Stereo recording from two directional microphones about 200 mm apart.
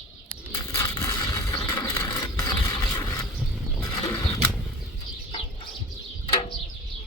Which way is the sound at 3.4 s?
5° left (ahead or behind).